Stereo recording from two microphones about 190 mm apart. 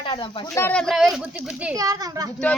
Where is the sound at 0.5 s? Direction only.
10° left (ahead or behind); by 1.7 s 5° right (ahead or behind).